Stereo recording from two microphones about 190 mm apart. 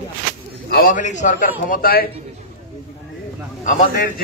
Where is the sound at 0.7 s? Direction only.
45° left (ahead or behind).